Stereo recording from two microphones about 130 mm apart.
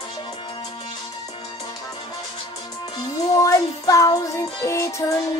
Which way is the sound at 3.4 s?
25° left (ahead or behind).